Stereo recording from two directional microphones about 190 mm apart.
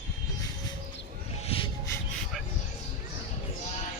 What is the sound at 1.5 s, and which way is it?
Music, 30° left (ahead or behind).